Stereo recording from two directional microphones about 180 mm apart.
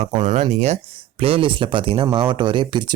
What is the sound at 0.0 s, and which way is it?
Speech, 25° right (ahead or behind).